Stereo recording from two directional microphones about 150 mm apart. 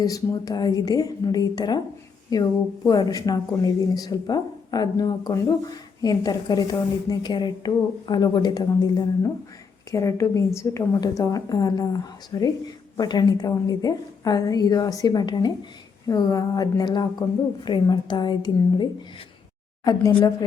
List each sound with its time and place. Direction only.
0.0 s a woman's voice: 25° left (ahead or behind)